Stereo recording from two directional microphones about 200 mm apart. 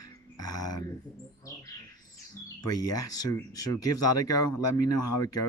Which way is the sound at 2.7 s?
20° left (ahead or behind).